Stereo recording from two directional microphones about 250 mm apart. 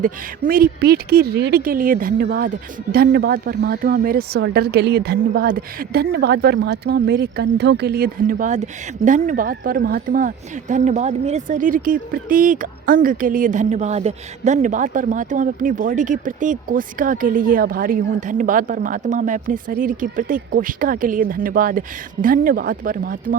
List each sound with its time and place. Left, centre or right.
0.0 s speech: right